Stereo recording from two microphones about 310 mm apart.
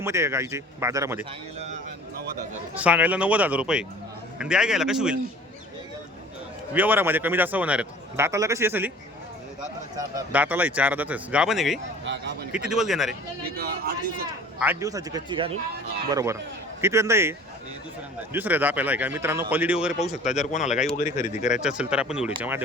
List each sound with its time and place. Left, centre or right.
0.0 s a man's voice: centre
1.5 s speech: right
2.7 s speech: centre
6.7 s a man's voice: centre
10.2 s speech: centre
12.0 s speech: right
12.5 s speech: centre
13.6 s speech: right
14.6 s a man's voice: centre
18.3 s speech: centre
20.4 s speech: left
21.5 s speech: centre